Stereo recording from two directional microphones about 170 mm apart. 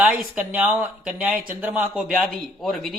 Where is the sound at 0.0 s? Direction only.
5° right (ahead or behind).